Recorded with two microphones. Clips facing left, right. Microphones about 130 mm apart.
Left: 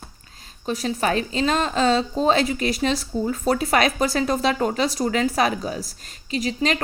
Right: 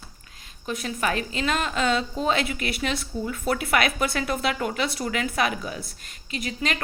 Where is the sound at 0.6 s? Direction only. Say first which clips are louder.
Left 4 dB; 35° left (ahead or behind).